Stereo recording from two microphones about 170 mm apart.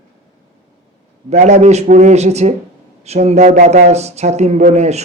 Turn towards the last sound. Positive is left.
turn(degrees=-40)  # may be behind; listen again after turning